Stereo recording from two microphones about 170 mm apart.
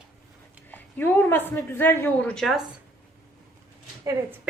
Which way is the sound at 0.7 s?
10° left (ahead or behind).